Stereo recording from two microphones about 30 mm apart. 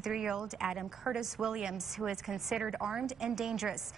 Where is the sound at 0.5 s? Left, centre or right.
Centre.